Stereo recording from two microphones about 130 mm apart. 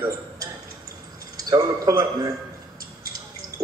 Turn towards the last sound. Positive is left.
turn(degrees=-25)  # may be behind; listen again after turning